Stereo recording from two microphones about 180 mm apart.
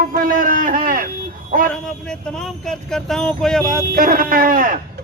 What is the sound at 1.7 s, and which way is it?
Speech, 5° left (ahead or behind).